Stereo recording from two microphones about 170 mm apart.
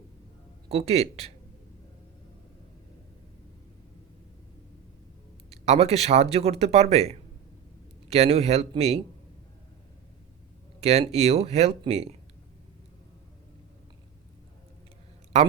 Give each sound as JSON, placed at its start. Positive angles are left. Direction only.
{"t": 0.7, "sound": "speech", "side_deg": -35}
{"t": 5.5, "sound": "speech", "side_deg": -40}
{"t": 10.8, "sound": "speech", "side_deg": -40}
{"t": 15.3, "sound": "speech", "side_deg": -40}